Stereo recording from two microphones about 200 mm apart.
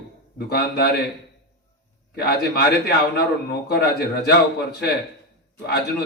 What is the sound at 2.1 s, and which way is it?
A man's voice, 50° left (ahead or behind).